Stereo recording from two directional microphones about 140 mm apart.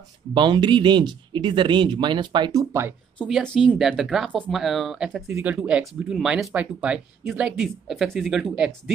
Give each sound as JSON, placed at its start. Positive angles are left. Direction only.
{"t": 0.3, "sound": "speech", "side_deg": -35}
{"t": 3.3, "sound": "speech", "side_deg": 0}
{"t": 5.3, "sound": "speech", "side_deg": -15}